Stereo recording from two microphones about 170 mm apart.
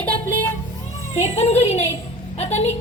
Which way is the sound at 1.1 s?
35° left (ahead or behind).